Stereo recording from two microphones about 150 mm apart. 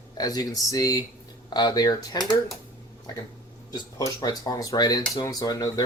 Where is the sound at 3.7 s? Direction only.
25° left (ahead or behind).